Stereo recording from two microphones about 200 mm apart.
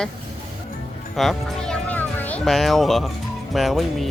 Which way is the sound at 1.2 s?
Centre (ahead or behind).